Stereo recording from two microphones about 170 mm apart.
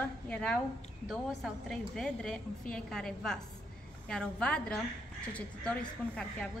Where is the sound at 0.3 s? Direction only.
5° left (ahead or behind).